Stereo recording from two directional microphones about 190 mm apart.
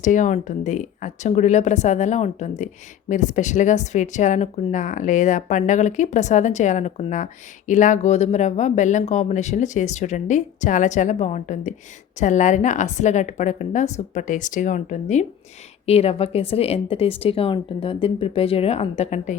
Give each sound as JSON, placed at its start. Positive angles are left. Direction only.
{"t": 0.0, "sound": "speech", "side_deg": 40}